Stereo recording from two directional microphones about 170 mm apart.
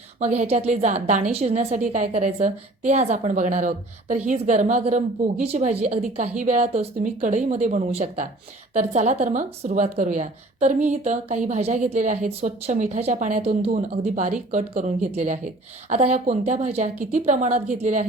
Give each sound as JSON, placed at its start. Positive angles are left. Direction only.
{"t": 0.2, "sound": "a woman's voice", "side_deg": -40}